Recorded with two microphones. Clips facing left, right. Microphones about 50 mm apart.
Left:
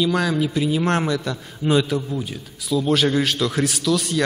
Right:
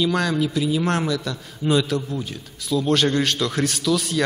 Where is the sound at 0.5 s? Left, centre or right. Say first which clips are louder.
Left 1 dB; left.